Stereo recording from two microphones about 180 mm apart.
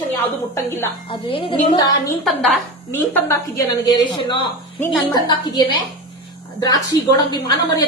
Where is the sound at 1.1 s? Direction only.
30° left (ahead or behind).